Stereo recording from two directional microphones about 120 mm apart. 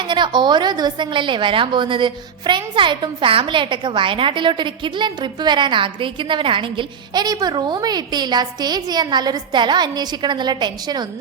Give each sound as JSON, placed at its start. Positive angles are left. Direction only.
{"t": 0.1, "sound": "a woman's voice", "side_deg": -40}